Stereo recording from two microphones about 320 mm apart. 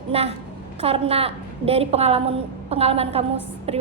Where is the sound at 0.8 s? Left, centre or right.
Centre.